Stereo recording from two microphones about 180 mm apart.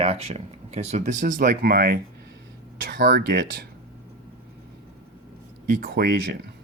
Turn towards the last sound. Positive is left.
turn(degrees=-60)  # may be behind; listen again after turning